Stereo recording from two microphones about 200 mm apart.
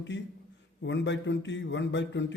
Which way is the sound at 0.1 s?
60° left (ahead or behind).